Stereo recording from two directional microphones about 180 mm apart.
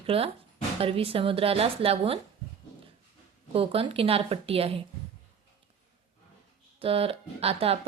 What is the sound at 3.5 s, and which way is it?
Speech, 30° right (ahead or behind).